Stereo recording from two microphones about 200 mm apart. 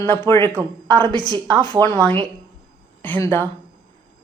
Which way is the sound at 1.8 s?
10° left (ahead or behind).